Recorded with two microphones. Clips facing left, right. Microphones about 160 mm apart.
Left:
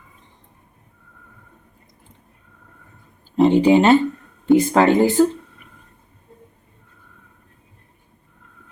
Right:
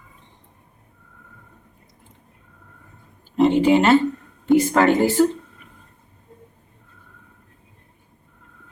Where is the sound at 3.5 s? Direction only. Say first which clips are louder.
Left 3 dB; 15° left (ahead or behind).